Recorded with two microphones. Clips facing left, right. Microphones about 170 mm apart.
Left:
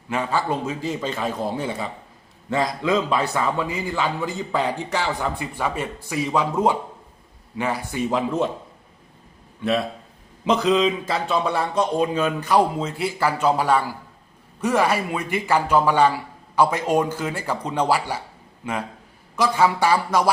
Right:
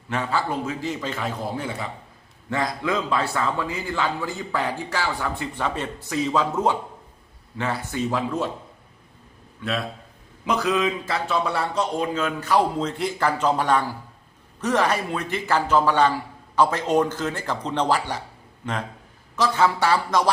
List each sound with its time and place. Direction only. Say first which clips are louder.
0.1 s a man's voice: left 2 dB; 15° left (ahead or behind)
10.4 s speech: left 4 dB; 25° left (ahead or behind)